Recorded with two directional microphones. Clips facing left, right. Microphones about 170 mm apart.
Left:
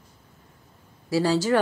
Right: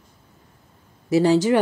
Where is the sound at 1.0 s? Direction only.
20° right (ahead or behind).